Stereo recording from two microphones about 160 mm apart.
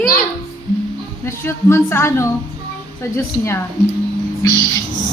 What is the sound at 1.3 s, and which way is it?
Speech, 15° left (ahead or behind).